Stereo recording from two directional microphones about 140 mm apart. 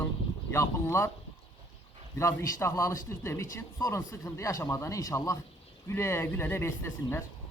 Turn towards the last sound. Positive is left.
turn(degrees=20)  # may be behind; listen again after turning